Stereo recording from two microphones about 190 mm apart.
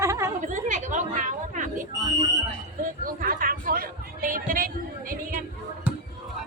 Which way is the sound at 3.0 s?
45° right (ahead or behind).